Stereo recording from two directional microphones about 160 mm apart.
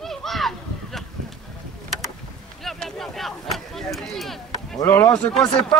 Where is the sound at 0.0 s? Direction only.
Centre (ahead or behind).